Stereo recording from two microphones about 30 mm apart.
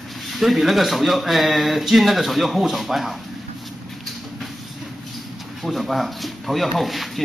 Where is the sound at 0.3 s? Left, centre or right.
Centre.